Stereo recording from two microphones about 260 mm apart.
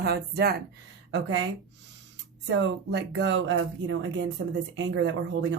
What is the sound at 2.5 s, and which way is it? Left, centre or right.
A woman's voice, right.